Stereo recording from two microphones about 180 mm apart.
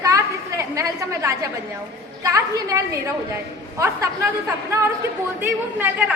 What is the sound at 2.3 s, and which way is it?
A woman's voice, 15° right (ahead or behind).